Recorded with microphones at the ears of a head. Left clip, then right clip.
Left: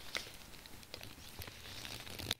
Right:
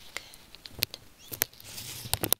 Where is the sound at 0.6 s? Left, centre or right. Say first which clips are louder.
Right 18 dB; right.